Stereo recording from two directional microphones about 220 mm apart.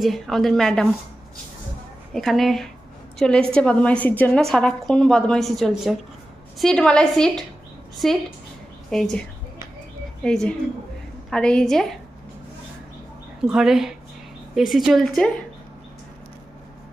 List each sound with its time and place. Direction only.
0.0 s a woman's voice: centre (ahead or behind)
2.1 s a woman's voice: centre (ahead or behind)
10.2 s a woman's voice: 5° left (ahead or behind)
13.4 s a woman's voice: 5° right (ahead or behind)